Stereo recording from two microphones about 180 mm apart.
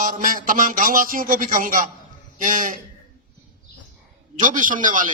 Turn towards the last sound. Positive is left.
turn(degrees=-45)  # may be behind; listen again after turning